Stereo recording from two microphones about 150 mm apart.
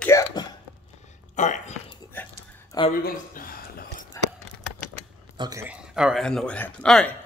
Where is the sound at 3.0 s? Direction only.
75° left (ahead or behind).